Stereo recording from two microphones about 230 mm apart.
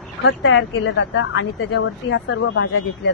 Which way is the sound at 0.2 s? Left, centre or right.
Left.